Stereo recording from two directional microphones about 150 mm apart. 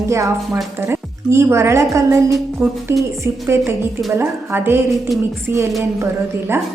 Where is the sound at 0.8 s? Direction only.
15° right (ahead or behind).